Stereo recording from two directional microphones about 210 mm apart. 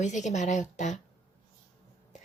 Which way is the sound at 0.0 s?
35° left (ahead or behind).